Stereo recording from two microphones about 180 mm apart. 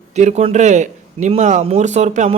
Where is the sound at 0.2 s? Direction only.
40° right (ahead or behind).